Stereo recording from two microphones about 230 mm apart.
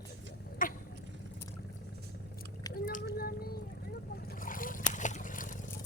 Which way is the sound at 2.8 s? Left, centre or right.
Left.